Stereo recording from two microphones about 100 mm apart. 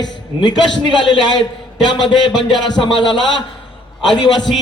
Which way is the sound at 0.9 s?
55° left (ahead or behind).